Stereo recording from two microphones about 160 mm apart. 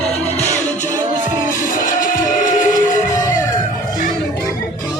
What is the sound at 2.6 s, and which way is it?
Music, 20° left (ahead or behind).